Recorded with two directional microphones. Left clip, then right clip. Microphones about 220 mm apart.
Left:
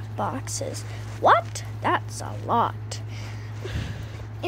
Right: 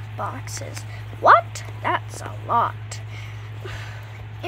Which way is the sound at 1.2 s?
15° right (ahead or behind).